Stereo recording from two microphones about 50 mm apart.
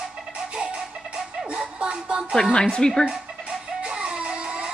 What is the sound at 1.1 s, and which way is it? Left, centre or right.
Music, right.